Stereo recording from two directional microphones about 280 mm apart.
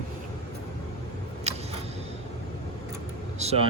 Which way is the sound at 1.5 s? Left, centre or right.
Right.